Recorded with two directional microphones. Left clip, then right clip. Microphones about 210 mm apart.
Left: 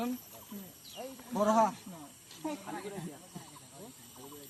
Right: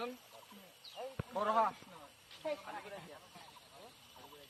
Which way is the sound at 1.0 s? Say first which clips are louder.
Left 2 dB; 45° left (ahead or behind).